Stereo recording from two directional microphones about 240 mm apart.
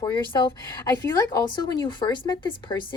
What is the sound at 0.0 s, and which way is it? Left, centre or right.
Speech, centre.